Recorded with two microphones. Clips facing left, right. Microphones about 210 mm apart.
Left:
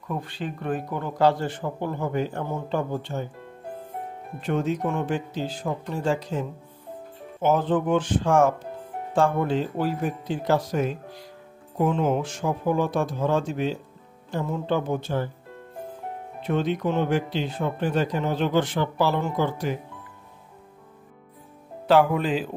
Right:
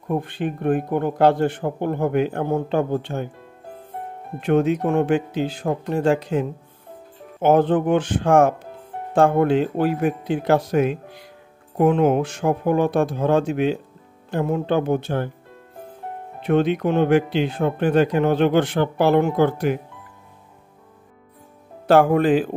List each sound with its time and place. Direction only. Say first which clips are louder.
0.1 s speech: right 7 dB; 55° right (ahead or behind)
4.4 s speech: right 7 dB; 65° right (ahead or behind)
7.4 s speech: right 5 dB; 60° right (ahead or behind)
16.4 s speech: right 6 dB; 60° right (ahead or behind)
21.8 s speech: right 5 dB; 50° right (ahead or behind)